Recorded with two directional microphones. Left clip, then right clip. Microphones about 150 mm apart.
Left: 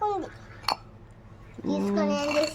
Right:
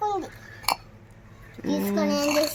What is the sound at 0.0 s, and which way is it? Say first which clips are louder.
Babbling: right 1 dB; centre (ahead or behind).